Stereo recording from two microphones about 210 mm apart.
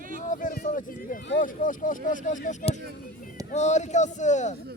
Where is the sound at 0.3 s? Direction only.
40° left (ahead or behind).